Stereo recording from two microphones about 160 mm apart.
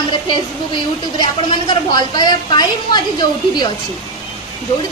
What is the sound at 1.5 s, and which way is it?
Speech, 30° left (ahead or behind).